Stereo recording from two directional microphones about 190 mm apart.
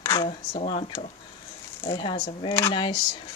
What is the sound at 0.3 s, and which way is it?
Speech, 35° left (ahead or behind).